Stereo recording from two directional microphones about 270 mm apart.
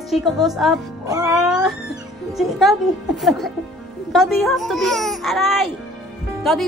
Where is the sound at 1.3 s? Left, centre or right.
Centre.